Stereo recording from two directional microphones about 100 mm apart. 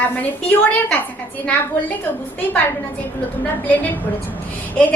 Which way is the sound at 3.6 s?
15° left (ahead or behind).